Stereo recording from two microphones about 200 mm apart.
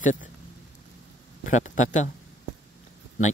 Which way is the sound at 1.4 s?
40° left (ahead or behind).